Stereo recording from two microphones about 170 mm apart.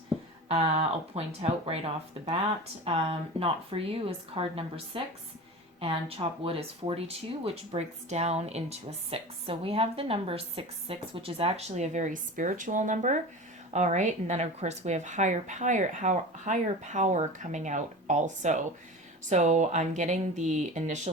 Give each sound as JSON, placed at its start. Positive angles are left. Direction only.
{"t": 0.5, "sound": "speech", "side_deg": -40}
{"t": 2.8, "sound": "speech", "side_deg": -35}
{"t": 11.7, "sound": "a woman's voice", "side_deg": -45}